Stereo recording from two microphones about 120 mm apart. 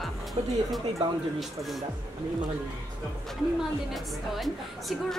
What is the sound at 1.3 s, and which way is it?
Speech, centre (ahead or behind).